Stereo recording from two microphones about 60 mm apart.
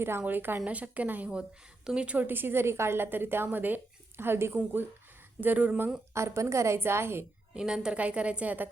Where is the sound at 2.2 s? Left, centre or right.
Right.